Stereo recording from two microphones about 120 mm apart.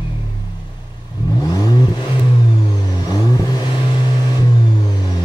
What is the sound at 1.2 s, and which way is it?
Vehicle, 30° left (ahead or behind).